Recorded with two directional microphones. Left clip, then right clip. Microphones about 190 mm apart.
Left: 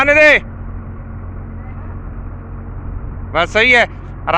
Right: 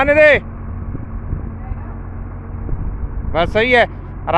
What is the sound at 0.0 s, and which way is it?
Speech, 15° right (ahead or behind).